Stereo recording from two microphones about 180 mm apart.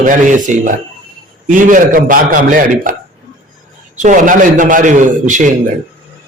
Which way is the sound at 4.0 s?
45° right (ahead or behind).